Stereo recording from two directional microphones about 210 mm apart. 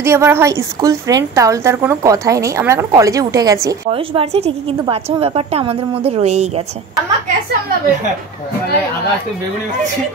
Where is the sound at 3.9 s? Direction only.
25° right (ahead or behind).